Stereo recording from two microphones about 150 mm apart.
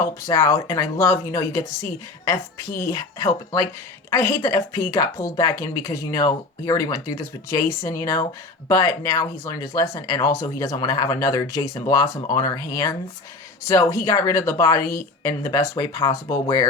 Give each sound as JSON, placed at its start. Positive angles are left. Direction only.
{"t": 0.2, "sound": "speech", "side_deg": 20}